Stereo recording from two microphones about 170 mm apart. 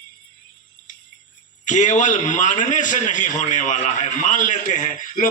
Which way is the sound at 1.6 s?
45° left (ahead or behind).